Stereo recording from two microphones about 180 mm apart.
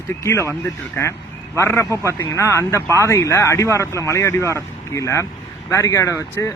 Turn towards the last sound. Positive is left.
turn(degrees=15)  # may be behind; listen again after turning